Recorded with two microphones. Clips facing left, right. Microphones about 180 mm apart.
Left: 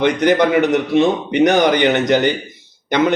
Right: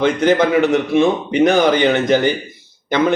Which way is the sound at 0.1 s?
15° left (ahead or behind).